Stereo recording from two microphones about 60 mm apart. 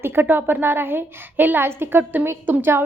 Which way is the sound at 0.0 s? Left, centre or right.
Right.